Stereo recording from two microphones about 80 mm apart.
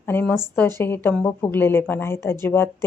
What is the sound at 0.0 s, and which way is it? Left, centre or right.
A woman's voice, left.